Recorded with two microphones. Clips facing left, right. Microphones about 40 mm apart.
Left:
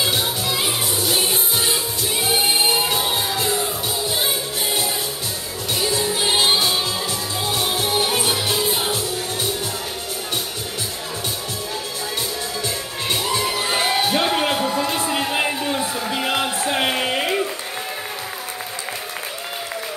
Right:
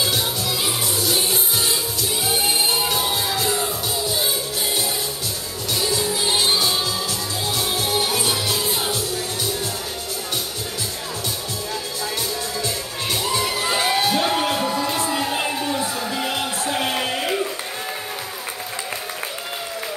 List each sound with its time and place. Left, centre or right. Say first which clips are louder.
0.0 s music: left 1 dB; left
5.7 s music: left 1 dB; left
12.6 s music: left 1 dB; left
13.4 s crowd: even; centre
14.2 s music: left 1 dB; left
14.6 s music: left 1 dB; centre
15.3 s crowd: left 2 dB; left
16.5 s a sound: left 2 dB; left